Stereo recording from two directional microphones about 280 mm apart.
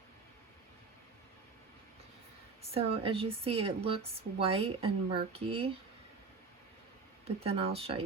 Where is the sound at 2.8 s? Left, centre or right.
Centre.